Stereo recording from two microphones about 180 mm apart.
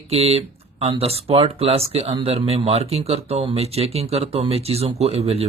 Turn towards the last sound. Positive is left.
turn(degrees=-35)  # may be behind; listen again after turning